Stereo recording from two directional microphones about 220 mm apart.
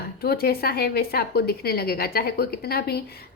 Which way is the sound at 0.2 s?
45° left (ahead or behind).